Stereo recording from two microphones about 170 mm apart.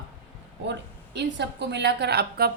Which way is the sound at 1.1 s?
90° right.